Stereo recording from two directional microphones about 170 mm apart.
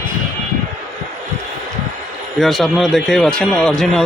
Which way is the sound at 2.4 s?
Centre (ahead or behind).